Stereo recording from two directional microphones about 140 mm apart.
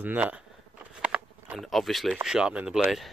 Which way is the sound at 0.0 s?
10° right (ahead or behind).